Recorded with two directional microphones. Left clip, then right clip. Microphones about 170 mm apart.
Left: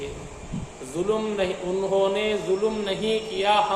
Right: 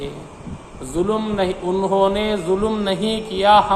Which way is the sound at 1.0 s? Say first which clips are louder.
Right 3 dB; 40° right (ahead or behind).